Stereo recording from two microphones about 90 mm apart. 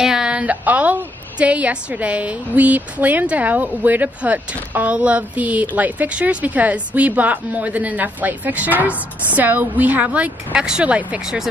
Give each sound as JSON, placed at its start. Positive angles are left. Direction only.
{"t": 0.0, "sound": "a woman's voice", "side_deg": -5}